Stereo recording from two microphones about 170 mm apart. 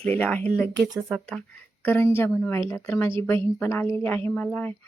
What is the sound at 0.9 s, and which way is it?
Speech, 5° right (ahead or behind).